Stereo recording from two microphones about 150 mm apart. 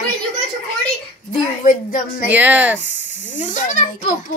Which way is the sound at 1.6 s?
65° left (ahead or behind).